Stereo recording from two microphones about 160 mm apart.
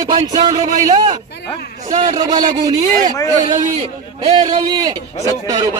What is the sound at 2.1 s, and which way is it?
Speech, 25° right (ahead or behind).